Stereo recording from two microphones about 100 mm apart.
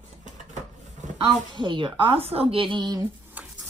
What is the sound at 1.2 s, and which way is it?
A woman's voice, 55° right (ahead or behind).